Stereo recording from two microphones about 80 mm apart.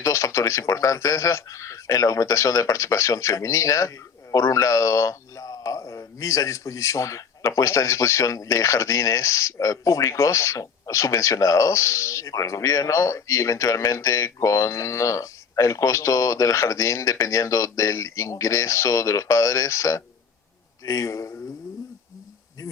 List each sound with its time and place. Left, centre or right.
0.0 s a man's voice: left